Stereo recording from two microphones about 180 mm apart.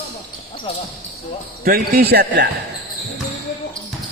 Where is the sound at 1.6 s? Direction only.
60° right (ahead or behind).